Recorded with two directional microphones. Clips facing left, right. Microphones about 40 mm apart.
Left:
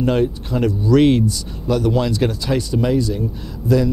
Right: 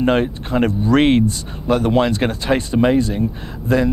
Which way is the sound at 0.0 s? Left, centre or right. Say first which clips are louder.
Right 1 dB; right.